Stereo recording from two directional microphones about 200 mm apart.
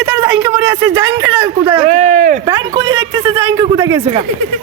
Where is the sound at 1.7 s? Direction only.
35° right (ahead or behind).